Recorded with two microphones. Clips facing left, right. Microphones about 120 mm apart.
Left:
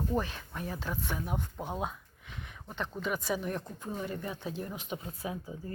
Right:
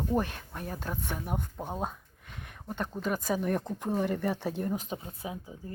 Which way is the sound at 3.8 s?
70° right (ahead or behind).